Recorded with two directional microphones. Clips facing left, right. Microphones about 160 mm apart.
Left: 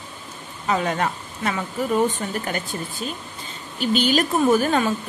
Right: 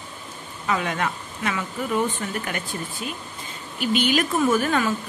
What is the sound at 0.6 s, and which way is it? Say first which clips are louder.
Speech: left 3 dB; 35° left (ahead or behind).